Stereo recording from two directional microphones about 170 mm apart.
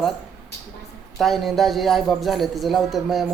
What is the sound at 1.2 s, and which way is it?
A man's voice, centre (ahead or behind).